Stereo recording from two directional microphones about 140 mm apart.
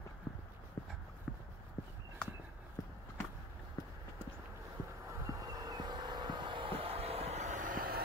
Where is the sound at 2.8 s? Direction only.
25° left (ahead or behind).